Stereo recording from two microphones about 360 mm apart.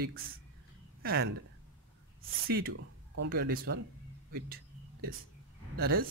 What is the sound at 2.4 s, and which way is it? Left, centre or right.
Speech, right.